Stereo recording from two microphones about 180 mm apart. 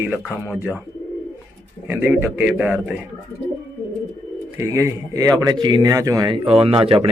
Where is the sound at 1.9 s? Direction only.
10° right (ahead or behind).